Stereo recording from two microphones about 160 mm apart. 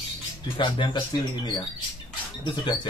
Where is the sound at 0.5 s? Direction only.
30° left (ahead or behind).